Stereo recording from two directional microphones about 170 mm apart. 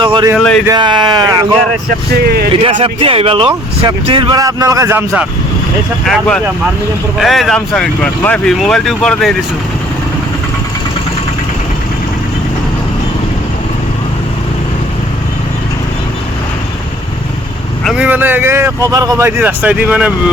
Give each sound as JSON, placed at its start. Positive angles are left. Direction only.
{"t": 0.0, "sound": "a sound", "side_deg": -30}
{"t": 0.3, "sound": "speech", "side_deg": 5}
{"t": 0.7, "sound": "a man's voice", "side_deg": -25}
{"t": 2.8, "sound": "a man's voice", "side_deg": -30}
{"t": 6.1, "sound": "speech", "side_deg": 5}
{"t": 17.8, "sound": "a man's voice", "side_deg": -5}